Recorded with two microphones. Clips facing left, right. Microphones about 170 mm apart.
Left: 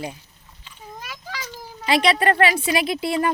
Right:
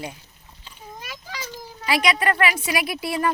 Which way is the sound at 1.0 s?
Centre (ahead or behind).